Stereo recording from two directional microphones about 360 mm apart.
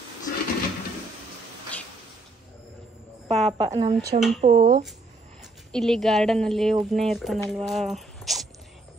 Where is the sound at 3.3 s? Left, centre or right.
Centre.